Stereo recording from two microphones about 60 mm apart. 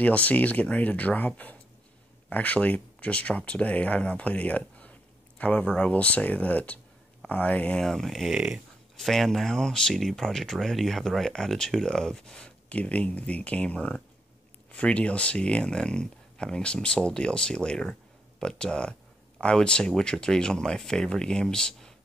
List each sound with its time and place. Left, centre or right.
0.0 s speech: left
7.8 s speech: centre